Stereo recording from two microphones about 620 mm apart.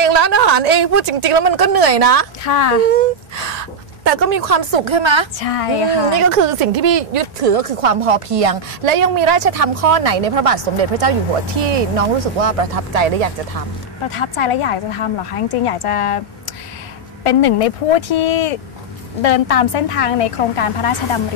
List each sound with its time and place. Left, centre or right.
0.0 s a woman's voice: right
2.4 s a woman's voice: left
2.9 s a sound: right
4.2 s a woman's voice: right
4.8 s a woman's voice: right
5.4 s a woman's voice: left
6.9 s speech: right
14.1 s a woman's voice: left
17.2 s a woman's voice: left